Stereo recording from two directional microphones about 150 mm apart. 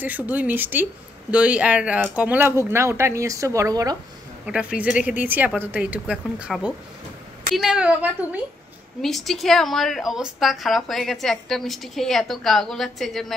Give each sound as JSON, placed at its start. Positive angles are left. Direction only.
{"t": 0.0, "sound": "speech", "side_deg": -10}
{"t": 4.5, "sound": "speech", "side_deg": -5}
{"t": 9.0, "sound": "a woman's voice", "side_deg": 0}